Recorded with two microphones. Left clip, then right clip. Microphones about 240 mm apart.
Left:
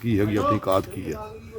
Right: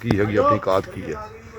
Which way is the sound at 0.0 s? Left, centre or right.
Centre.